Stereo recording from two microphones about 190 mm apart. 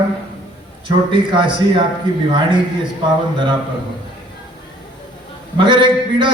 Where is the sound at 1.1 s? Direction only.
25° right (ahead or behind).